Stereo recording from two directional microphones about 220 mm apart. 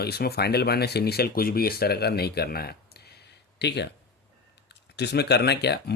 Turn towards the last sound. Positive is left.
turn(degrees=50)  # may be behind; listen again after turning